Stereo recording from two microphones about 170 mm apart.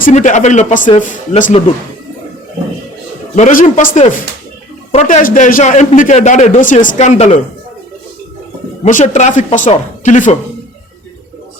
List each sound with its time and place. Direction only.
0.0 s a man's voice: 45° left (ahead or behind)
3.3 s a man's voice: 50° left (ahead or behind)
8.8 s a man's voice: 45° left (ahead or behind)